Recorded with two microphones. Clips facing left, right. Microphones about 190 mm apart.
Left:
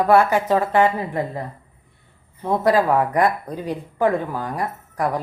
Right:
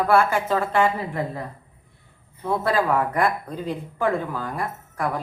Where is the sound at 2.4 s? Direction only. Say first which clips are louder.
Left 4 dB; 15° left (ahead or behind).